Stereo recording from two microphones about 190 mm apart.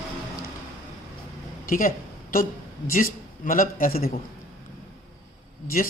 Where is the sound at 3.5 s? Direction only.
45° left (ahead or behind).